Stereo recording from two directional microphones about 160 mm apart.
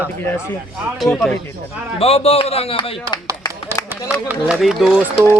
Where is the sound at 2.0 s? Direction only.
40° left (ahead or behind).